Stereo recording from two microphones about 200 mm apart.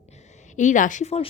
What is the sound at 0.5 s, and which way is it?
Speech, 40° left (ahead or behind).